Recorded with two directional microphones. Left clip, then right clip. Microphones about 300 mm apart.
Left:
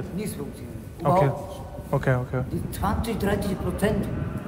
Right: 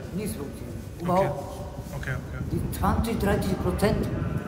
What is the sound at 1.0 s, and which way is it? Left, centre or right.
A man's voice, centre.